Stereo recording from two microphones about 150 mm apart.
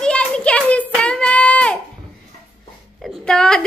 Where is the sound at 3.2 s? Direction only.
5° left (ahead or behind).